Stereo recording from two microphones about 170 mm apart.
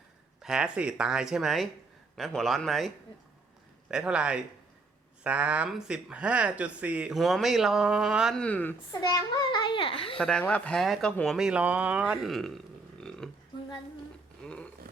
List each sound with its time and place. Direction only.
0.4 s speech: 5° right (ahead or behind)
3.9 s speech: 5° right (ahead or behind)
8.9 s a child's voice: 25° left (ahead or behind)
10.2 s speech: 5° left (ahead or behind)
13.0 s a sound: 5° left (ahead or behind)
14.4 s a sound: 5° left (ahead or behind)